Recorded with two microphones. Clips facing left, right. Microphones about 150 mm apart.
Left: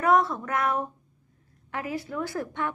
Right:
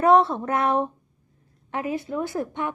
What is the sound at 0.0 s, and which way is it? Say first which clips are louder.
A woman's voice: right 5 dB; 30° right (ahead or behind).